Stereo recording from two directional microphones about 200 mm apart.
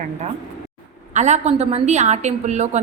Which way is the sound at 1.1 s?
35° right (ahead or behind).